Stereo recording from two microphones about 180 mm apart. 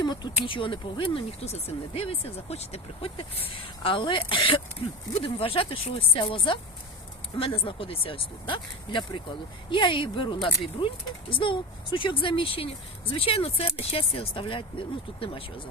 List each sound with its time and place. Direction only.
0.0 s speech: 25° left (ahead or behind)